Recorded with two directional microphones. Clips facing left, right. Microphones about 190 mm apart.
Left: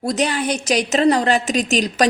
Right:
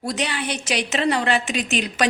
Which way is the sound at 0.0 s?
40° left (ahead or behind).